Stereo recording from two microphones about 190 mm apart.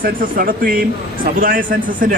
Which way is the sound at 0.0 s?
50° right (ahead or behind).